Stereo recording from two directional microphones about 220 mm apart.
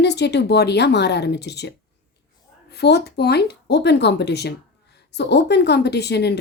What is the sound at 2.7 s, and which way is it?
A woman's voice, 50° left (ahead or behind).